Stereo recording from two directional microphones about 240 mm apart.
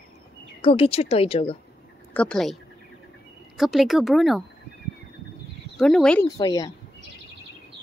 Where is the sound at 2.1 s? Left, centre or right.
Centre.